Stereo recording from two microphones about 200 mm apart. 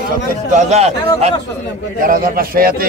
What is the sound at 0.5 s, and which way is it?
Speech, 35° right (ahead or behind).